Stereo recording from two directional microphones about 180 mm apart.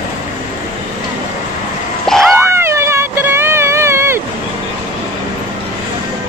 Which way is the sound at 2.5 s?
15° right (ahead or behind).